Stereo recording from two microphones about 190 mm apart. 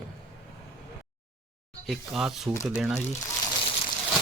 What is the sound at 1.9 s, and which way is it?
Speech, centre (ahead or behind).